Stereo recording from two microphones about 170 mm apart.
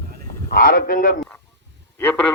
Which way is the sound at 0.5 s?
55° left (ahead or behind).